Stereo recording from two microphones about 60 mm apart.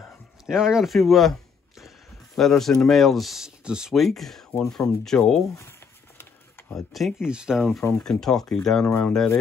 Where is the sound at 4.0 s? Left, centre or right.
Centre.